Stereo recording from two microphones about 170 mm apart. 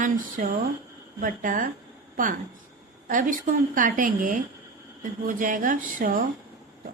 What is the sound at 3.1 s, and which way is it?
A woman's voice, 50° right (ahead or behind).